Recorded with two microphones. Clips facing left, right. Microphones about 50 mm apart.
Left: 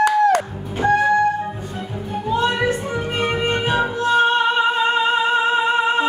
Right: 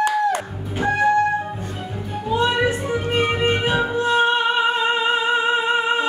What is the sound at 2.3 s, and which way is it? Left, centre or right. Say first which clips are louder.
Music: even; centre.